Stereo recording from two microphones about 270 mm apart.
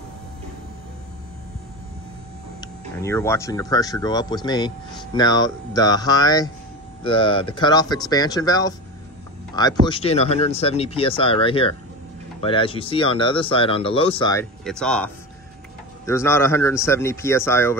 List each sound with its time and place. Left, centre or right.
2.6 s speech: centre
16.1 s speech: centre